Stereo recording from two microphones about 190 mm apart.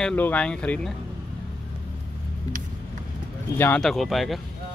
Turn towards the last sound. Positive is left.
turn(degrees=0)  # may be behind; listen again after turning